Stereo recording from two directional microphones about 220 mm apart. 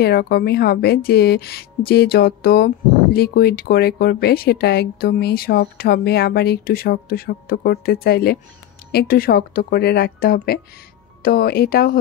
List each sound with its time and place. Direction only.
0.0 s speech: 45° left (ahead or behind)